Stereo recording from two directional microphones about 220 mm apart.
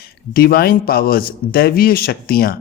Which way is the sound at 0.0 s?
45° left (ahead or behind).